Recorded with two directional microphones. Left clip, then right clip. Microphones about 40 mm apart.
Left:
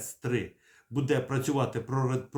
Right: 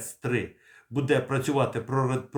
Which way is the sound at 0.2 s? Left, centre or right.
Centre.